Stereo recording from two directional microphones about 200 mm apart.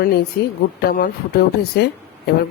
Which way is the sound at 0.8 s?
45° left (ahead or behind).